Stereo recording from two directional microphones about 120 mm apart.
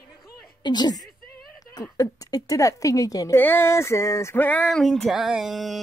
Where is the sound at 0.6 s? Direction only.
35° left (ahead or behind).